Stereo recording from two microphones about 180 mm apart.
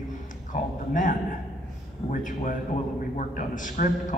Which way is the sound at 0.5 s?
45° left (ahead or behind).